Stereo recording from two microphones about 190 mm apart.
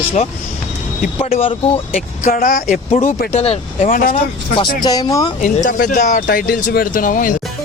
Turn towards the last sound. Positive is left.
turn(degrees=45)  # may be behind; listen again after turning